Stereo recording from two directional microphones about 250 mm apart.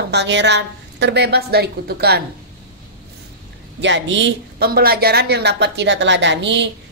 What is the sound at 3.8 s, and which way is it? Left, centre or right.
Speech, right.